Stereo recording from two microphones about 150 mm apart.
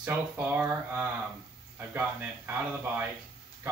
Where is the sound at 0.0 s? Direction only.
10° right (ahead or behind).